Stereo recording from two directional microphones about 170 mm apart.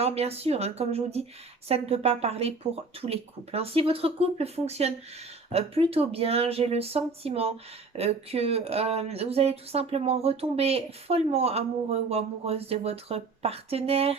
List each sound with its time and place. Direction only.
0.0 s speech: 35° right (ahead or behind)